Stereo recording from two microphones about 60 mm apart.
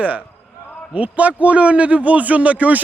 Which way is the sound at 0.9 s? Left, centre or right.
Right.